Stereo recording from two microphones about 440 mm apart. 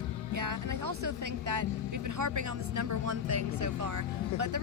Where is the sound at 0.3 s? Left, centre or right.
Right.